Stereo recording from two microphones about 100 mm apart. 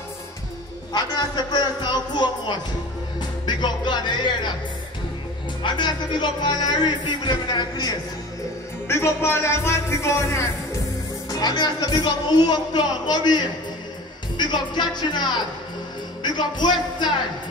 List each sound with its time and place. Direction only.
0.9 s speech: 45° left (ahead or behind)
5.6 s speech: 50° left (ahead or behind)
8.8 s speech: 25° left (ahead or behind)
11.2 s speech: 40° left (ahead or behind)
16.2 s music: 45° left (ahead or behind)